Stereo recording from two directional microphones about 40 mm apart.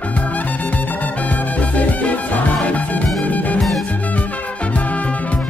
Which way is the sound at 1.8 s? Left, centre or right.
Left.